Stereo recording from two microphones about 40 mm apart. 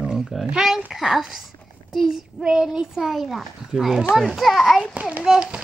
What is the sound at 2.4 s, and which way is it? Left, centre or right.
Speech, right.